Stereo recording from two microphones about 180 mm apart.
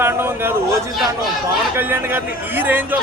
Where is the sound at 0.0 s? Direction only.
10° right (ahead or behind).